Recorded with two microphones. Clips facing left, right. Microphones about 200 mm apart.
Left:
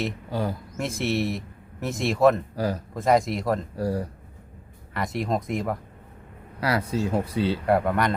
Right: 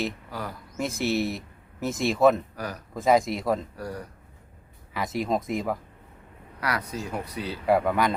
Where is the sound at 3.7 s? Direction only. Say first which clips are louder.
Left 8 dB; 30° left (ahead or behind).